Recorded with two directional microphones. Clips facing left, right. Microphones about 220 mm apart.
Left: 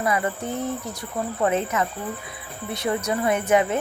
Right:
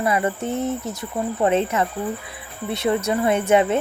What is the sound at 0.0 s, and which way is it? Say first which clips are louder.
Speech: right 3 dB; 25° right (ahead or behind).